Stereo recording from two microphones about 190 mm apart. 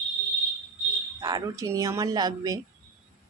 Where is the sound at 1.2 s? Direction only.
20° right (ahead or behind).